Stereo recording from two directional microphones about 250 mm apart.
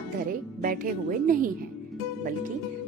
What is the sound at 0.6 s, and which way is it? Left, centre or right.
Speech, right.